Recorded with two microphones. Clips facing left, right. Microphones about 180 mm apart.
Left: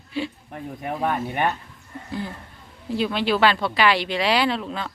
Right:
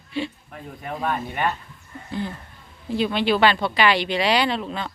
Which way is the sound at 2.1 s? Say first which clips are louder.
Right 2 dB; 5° left (ahead or behind).